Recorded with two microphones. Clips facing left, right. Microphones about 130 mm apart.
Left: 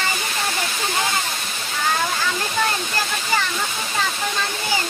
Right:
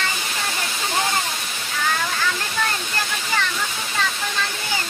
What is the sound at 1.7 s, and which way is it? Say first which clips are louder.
Waterfall: left 2 dB; 20° left (ahead or behind).